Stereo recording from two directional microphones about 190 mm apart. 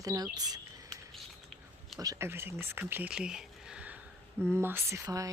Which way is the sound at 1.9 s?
15° right (ahead or behind).